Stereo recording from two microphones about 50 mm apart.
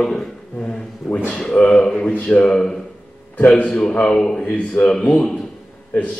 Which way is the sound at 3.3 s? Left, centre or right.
Left.